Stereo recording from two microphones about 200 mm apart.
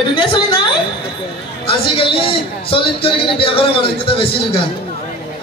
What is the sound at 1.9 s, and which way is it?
A man's voice, 25° left (ahead or behind).